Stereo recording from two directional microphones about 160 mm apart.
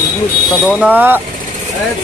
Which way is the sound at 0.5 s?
5° right (ahead or behind).